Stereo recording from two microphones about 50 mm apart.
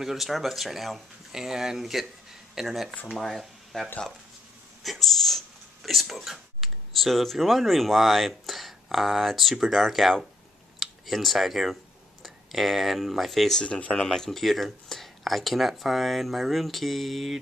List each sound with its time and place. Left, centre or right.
0.0 s speech: centre
13.6 s speech: left
14.0 s speech: centre